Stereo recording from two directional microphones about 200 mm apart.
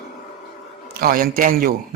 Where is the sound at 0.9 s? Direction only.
45° right (ahead or behind).